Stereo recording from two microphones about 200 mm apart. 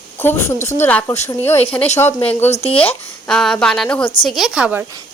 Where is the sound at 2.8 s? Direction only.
5° left (ahead or behind).